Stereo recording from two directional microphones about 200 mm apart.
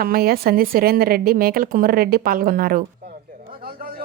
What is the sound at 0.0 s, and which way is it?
Speech, 50° right (ahead or behind).